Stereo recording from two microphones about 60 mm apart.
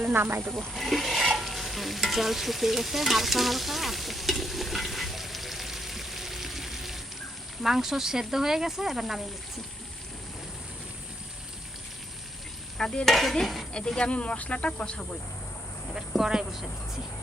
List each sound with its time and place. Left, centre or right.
0.1 s speech: right
0.7 s stir: centre
7.6 s speech: centre
12.7 s stir: centre
13.7 s speech: centre
16.0 s speech: centre